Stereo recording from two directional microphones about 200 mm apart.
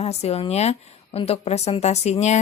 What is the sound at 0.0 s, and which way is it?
A woman's voice, 30° left (ahead or behind).